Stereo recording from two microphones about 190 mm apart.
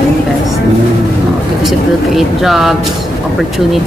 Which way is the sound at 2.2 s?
Centre (ahead or behind).